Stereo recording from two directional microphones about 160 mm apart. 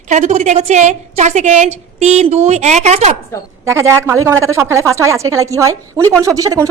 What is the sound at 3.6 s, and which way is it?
A woman's voice, 15° right (ahead or behind).